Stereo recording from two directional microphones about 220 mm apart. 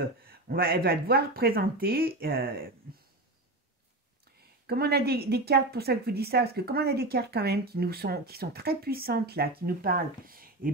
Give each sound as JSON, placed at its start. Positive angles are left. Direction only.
{"t": 0.2, "sound": "a woman's voice", "side_deg": -45}
{"t": 4.4, "sound": "a woman's voice", "side_deg": -45}